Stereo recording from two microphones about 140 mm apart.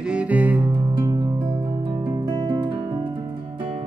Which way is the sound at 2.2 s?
35° right (ahead or behind).